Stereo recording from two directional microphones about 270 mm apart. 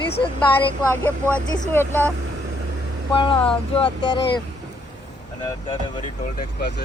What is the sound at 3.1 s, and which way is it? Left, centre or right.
Speech, centre.